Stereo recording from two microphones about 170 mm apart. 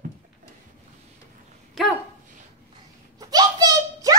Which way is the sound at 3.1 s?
20° right (ahead or behind).